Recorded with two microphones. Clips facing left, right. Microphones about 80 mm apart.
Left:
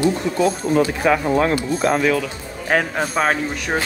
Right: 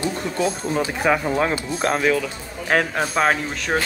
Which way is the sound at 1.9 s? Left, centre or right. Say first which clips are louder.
Left 2 dB; left.